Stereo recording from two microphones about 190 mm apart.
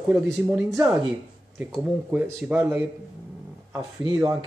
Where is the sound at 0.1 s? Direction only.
5° right (ahead or behind).